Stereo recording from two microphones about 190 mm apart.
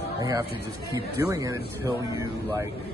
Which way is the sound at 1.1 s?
20° right (ahead or behind).